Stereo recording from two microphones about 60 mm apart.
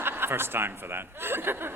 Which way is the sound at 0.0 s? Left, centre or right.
Right.